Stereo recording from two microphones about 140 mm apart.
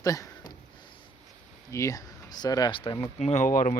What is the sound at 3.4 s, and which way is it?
Speech, 70° left (ahead or behind).